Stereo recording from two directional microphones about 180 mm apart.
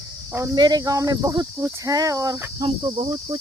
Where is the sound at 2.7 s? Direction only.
30° right (ahead or behind).